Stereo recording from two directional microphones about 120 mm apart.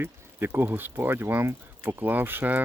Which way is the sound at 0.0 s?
15° right (ahead or behind).